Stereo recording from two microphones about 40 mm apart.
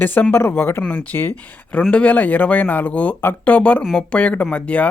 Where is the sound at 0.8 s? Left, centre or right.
Left.